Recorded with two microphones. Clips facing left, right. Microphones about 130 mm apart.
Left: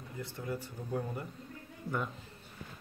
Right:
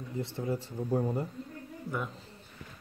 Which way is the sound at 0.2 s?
25° right (ahead or behind).